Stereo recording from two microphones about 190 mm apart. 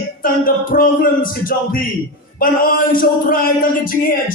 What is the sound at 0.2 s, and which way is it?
Male singing, 50° left (ahead or behind).